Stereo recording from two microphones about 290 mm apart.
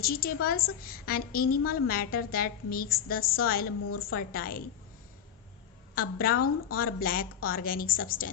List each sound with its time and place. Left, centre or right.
0.0 s a woman's voice: left
5.9 s speech: left